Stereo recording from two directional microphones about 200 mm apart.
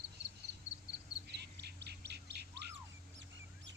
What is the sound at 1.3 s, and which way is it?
Bird, 55° right (ahead or behind).